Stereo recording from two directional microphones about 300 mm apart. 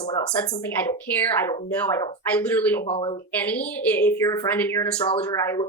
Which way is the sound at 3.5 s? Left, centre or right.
Centre.